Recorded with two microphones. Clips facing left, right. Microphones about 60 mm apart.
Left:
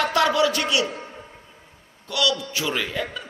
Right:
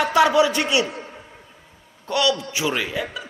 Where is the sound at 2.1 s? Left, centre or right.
Right.